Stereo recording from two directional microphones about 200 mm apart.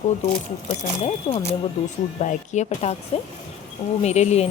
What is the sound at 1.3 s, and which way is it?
Speech, 25° left (ahead or behind).